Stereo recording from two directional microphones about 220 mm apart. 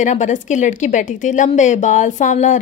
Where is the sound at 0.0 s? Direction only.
35° left (ahead or behind).